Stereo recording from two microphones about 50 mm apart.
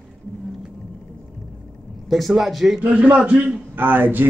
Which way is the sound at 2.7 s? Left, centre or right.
Right.